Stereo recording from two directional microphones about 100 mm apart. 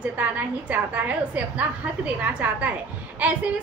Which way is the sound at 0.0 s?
15° right (ahead or behind).